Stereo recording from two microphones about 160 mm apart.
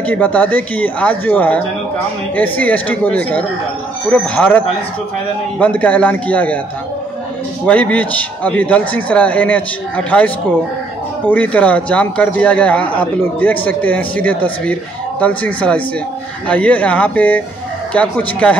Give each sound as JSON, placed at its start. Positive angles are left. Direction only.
{"t": 0.0, "sound": "a man's voice", "side_deg": 10}
{"t": 7.6, "sound": "a man's voice", "side_deg": 10}